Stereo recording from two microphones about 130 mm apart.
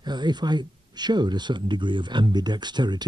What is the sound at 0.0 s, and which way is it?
Speech, 35° right (ahead or behind).